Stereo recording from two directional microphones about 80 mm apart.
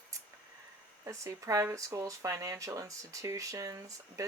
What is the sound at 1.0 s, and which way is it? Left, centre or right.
Speech, right.